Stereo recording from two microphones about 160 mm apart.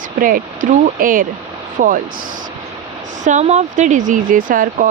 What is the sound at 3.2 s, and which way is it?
Speech, 45° right (ahead or behind).